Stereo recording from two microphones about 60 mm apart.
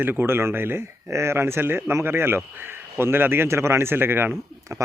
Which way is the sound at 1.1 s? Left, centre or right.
Right.